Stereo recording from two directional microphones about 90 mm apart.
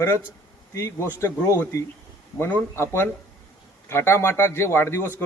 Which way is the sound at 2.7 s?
30° left (ahead or behind).